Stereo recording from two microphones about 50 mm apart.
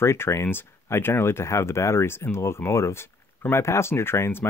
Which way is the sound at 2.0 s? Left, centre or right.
Left.